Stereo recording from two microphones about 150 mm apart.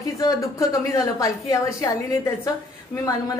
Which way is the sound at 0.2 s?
20° left (ahead or behind).